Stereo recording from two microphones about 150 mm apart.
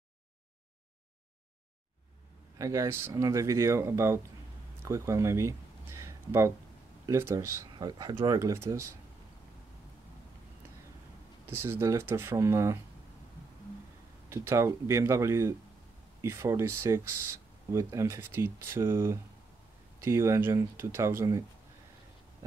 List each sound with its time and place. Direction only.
2.6 s speech: 20° right (ahead or behind)
4.8 s a sound: 20° right (ahead or behind)
7.1 s speech: 20° right (ahead or behind)
8.4 s speech: 20° right (ahead or behind)
11.6 s speech: 15° right (ahead or behind)
14.3 s speech: 20° right (ahead or behind)